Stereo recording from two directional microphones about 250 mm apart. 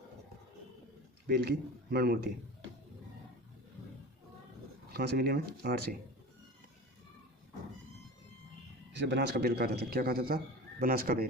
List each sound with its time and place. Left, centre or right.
1.3 s a man's voice: right
4.9 s a man's voice: right
9.0 s a man's voice: right